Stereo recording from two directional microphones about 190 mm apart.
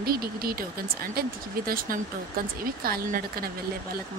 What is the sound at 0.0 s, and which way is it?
Speech, 50° right (ahead or behind).